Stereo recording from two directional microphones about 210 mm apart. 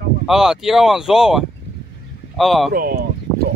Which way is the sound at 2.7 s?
45° right (ahead or behind).